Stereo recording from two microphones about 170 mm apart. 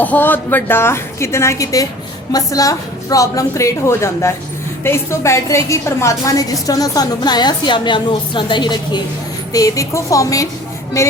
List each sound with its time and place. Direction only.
0.0 s a woman's voice: 10° left (ahead or behind)